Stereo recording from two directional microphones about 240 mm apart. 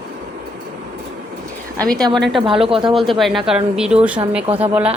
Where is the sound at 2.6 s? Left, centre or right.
Right.